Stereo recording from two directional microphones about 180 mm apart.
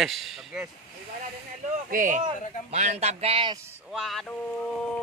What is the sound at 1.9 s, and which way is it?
Speech, 45° right (ahead or behind).